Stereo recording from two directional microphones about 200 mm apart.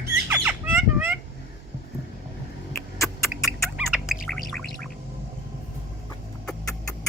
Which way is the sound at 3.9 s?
Centre (ahead or behind).